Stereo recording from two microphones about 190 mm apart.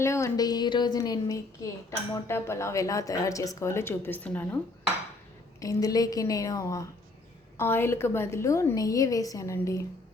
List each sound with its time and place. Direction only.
0.0 s a woman's voice: 15° left (ahead or behind)
5.5 s a woman's voice: 20° left (ahead or behind)